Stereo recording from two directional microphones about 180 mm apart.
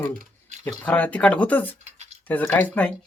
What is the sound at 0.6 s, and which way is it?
Speech, 5° left (ahead or behind).